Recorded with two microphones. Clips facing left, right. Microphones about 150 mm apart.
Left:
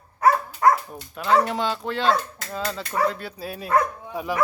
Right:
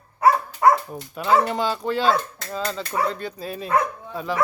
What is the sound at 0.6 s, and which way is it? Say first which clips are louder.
Speech: right 2 dB; 5° right (ahead or behind).